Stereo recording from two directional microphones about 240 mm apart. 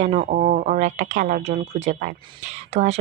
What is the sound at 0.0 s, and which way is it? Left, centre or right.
Speech, right.